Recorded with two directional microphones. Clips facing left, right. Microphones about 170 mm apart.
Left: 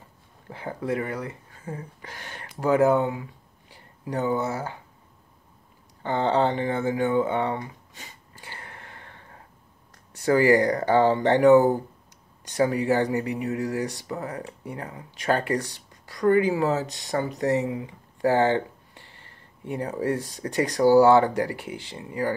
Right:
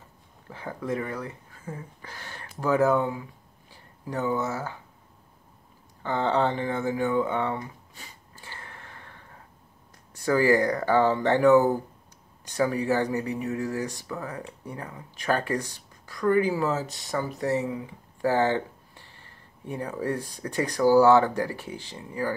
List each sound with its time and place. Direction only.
0.5 s speech: 15° left (ahead or behind)
1.7 s speech: 40° left (ahead or behind)
2.0 s speech: 20° left (ahead or behind)
4.1 s speech: 20° left (ahead or behind)
6.0 s speech: 20° left (ahead or behind)
10.1 s speech: 20° left (ahead or behind)
18.2 s a sound: 20° left (ahead or behind)
19.6 s speech: 20° left (ahead or behind)